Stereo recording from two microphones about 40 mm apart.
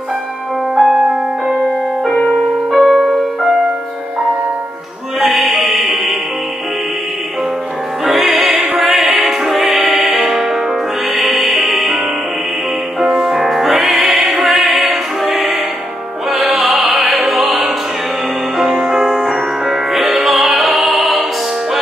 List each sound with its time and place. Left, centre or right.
0.7 s music: centre
2.0 s music: centre
2.7 s music: centre
5.2 s music: centre
8.0 s music: centre
13.0 s music: centre
18.9 s music: centre
19.2 s music: centre